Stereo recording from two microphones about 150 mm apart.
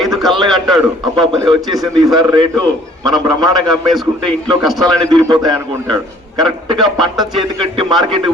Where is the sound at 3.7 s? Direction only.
Centre (ahead or behind).